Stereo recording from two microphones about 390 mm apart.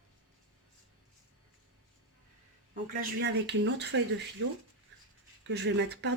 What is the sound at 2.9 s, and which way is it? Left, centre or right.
Speech, right.